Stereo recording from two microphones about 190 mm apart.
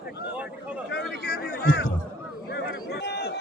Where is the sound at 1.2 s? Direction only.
55° left (ahead or behind).